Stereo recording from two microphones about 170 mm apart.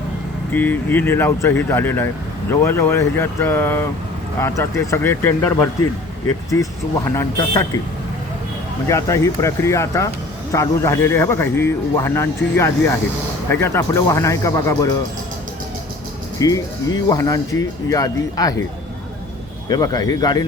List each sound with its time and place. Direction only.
0.5 s speech: 10° left (ahead or behind)
8.9 s speech: 15° left (ahead or behind)
16.4 s speech: 20° left (ahead or behind)
19.6 s speech: 20° left (ahead or behind)